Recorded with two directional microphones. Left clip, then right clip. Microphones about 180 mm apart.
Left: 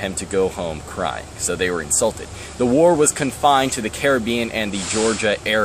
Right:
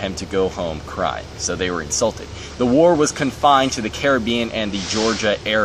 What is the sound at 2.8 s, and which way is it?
Speech, 20° left (ahead or behind).